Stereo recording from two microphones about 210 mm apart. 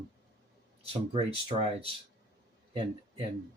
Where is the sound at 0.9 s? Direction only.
25° right (ahead or behind).